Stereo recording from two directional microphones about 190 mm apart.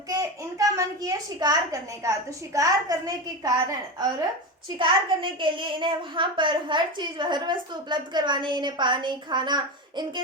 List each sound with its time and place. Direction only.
0.1 s a woman's voice: 15° right (ahead or behind)
4.8 s speech: 25° right (ahead or behind)